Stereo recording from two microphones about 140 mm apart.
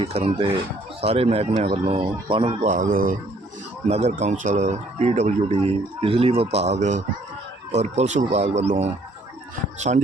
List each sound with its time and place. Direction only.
0.0 s speech: 45° right (ahead or behind); by 3.2 s 75° right (ahead or behind)
3.8 s speech: 55° right (ahead or behind)